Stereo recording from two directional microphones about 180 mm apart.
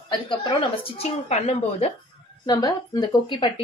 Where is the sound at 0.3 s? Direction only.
25° left (ahead or behind).